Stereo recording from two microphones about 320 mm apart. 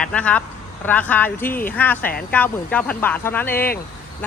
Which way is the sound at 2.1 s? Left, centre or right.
Left.